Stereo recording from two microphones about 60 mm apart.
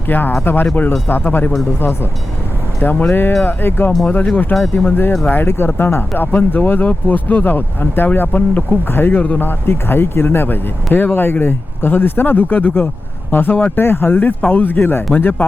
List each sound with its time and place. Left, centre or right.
0.1 s speech: left
2.9 s speech: left
9.5 s speech: left